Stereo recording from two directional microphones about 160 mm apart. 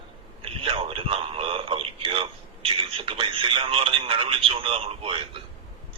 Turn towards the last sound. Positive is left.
turn(degrees=-35)  # may be behind; listen again after turning